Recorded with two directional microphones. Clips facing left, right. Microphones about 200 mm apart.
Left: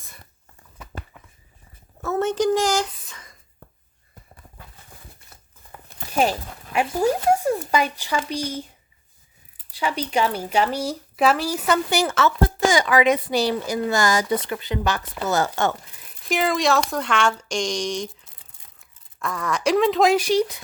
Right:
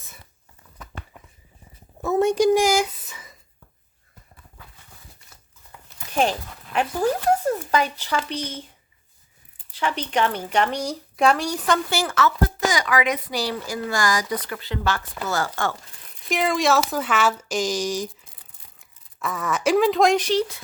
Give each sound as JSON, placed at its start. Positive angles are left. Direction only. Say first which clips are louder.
{"t": 2.0, "sound": "speech", "louder": "right 3 dB", "side_deg": -15}
{"t": 6.7, "sound": "speech", "louder": "left 1 dB", "side_deg": 10}
{"t": 9.7, "sound": "speech", "louder": "left 1 dB", "side_deg": 10}
{"t": 11.9, "sound": "speech", "louder": "left 2 dB", "side_deg": 20}
{"t": 16.0, "sound": "speech", "louder": "right 1 dB", "side_deg": 0}